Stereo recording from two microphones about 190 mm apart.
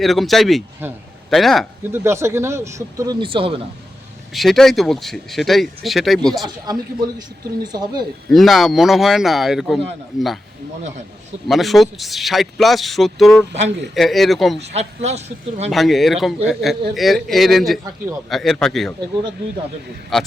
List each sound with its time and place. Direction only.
0.0 s speech: centre (ahead or behind)
1.9 s speech: 15° right (ahead or behind)
4.4 s speech: centre (ahead or behind)
7.6 s speech: 20° right (ahead or behind)
8.3 s speech: centre (ahead or behind)
11.4 s speech: centre (ahead or behind)
14.7 s speech: 35° right (ahead or behind)
15.7 s speech: centre (ahead or behind)